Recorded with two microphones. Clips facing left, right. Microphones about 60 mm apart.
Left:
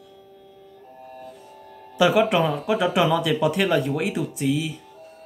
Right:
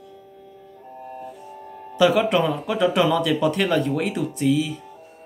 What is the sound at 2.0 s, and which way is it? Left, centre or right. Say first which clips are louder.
Speech: even; centre.